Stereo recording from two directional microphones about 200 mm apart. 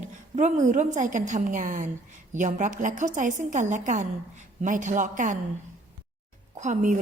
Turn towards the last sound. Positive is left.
turn(degrees=-35)  # may be behind; listen again after turning